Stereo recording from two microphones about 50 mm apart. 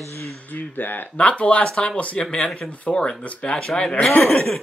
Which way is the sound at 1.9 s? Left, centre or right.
Left.